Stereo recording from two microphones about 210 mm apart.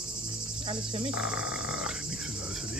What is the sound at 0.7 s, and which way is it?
Cricket, 25° right (ahead or behind).